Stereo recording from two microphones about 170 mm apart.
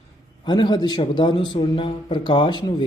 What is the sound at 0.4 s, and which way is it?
Speech, 25° left (ahead or behind).